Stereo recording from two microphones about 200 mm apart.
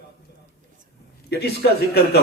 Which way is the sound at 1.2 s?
55° left (ahead or behind).